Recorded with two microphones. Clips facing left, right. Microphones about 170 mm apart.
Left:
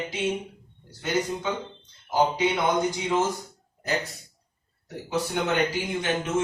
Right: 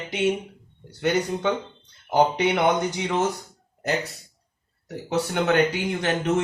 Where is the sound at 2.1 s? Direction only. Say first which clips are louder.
Right 3 dB; 65° right (ahead or behind).